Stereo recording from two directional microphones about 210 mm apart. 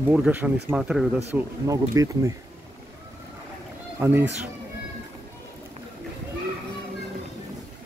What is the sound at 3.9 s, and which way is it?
Speech, 10° right (ahead or behind).